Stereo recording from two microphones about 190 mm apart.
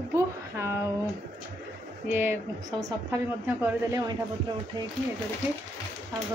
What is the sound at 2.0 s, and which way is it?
A woman's voice, 10° right (ahead or behind).